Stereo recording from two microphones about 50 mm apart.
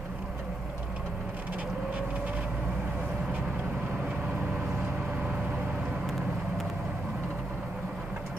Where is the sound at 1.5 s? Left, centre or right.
Right.